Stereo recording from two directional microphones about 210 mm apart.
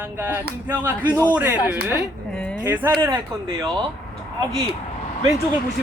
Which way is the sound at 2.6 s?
10° right (ahead or behind).